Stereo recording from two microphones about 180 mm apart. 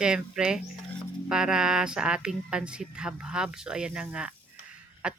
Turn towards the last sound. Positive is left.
turn(degrees=-5)  # may be behind; listen again after turning